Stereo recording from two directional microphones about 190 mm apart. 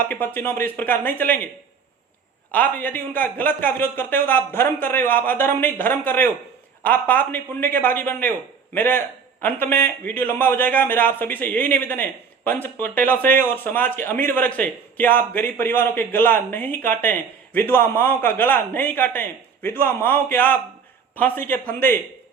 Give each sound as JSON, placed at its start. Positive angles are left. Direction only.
{"t": 0.0, "sound": "a man's voice", "side_deg": 10}
{"t": 2.5, "sound": "a man's voice", "side_deg": 10}